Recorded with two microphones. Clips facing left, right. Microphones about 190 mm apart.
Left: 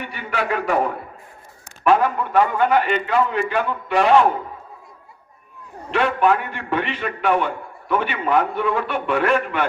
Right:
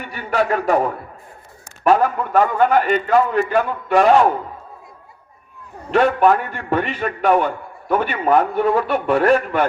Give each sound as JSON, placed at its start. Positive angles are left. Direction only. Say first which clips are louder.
{"t": 0.0, "sound": "a man's voice", "louder": "right 5 dB", "side_deg": -40}
{"t": 1.8, "sound": "a man's voice", "louder": "right 2 dB", "side_deg": -40}
{"t": 5.9, "sound": "a man's voice", "louder": "right 4 dB", "side_deg": -45}